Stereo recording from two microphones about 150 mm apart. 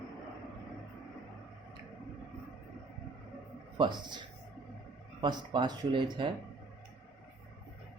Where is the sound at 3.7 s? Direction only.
30° right (ahead or behind).